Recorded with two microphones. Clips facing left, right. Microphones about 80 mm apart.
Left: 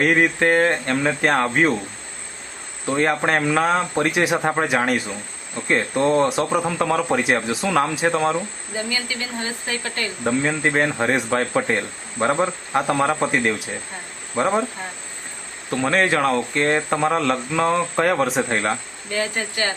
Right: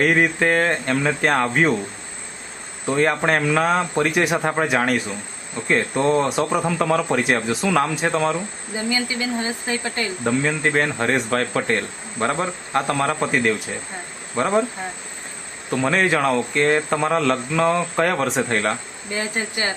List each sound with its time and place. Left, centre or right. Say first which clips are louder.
0.0 s speech: even; centre
2.8 s speech: right 1 dB; centre
8.7 s speech: right 3 dB; right
10.6 s speech: left 1 dB; centre
15.7 s speech: even; centre
19.1 s speech: left 1 dB; centre